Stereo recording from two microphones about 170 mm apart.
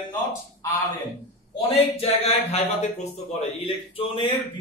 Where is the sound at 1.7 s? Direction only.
35° left (ahead or behind).